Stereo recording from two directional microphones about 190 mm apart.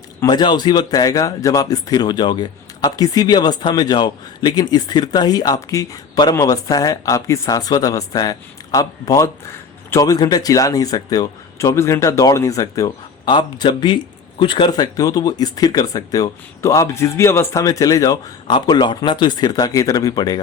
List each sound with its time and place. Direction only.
0.2 s speech: 20° left (ahead or behind)